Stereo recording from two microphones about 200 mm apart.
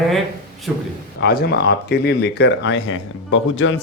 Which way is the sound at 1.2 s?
55° left (ahead or behind).